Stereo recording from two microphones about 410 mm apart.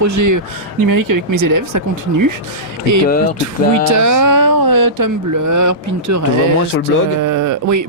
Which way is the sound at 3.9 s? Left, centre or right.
Right.